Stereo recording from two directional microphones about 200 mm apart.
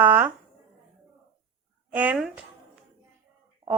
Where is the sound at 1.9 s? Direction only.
5° right (ahead or behind).